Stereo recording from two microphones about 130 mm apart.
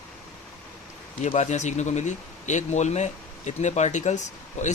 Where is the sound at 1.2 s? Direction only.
65° left (ahead or behind).